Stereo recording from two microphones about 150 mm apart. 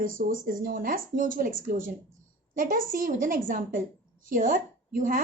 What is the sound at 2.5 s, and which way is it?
A woman's voice, 65° right (ahead or behind).